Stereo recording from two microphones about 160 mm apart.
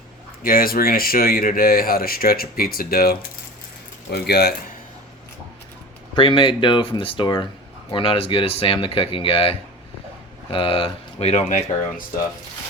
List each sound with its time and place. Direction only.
0.4 s speech: 65° left (ahead or behind)
4.1 s speech: 90° left
6.1 s speech: 35° left (ahead or behind); by 12.0 s 50° left (ahead or behind)